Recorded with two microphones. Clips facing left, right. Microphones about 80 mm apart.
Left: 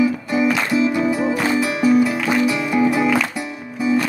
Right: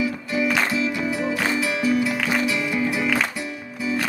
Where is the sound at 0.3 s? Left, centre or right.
Left.